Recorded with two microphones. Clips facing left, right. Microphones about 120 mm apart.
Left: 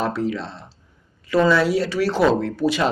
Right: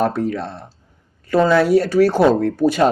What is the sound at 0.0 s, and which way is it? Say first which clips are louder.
Speech: right 4 dB; 50° right (ahead or behind).